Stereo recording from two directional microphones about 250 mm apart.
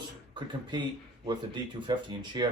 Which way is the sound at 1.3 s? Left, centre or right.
Centre.